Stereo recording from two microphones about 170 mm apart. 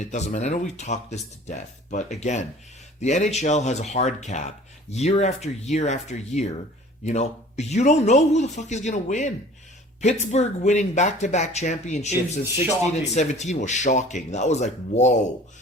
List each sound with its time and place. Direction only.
0.0 s speech: 45° left (ahead or behind)